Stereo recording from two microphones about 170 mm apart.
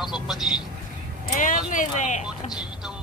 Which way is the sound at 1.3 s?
50° left (ahead or behind).